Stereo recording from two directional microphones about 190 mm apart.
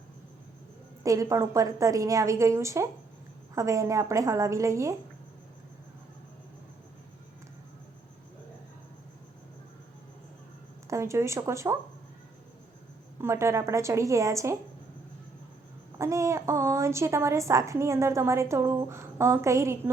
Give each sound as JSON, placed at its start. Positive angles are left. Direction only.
{"t": 1.0, "sound": "a woman's voice", "side_deg": -15}
{"t": 10.8, "sound": "speech", "side_deg": -15}
{"t": 13.2, "sound": "a woman's voice", "side_deg": -15}
{"t": 16.0, "sound": "a woman's voice", "side_deg": -15}